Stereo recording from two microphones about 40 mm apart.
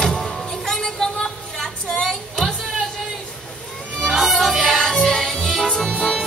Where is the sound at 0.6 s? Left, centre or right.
Centre.